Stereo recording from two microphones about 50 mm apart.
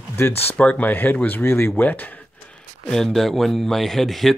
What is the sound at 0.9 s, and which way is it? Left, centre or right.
Speech, left.